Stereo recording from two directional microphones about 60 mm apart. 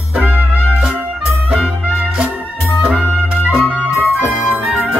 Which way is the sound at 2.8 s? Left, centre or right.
Centre.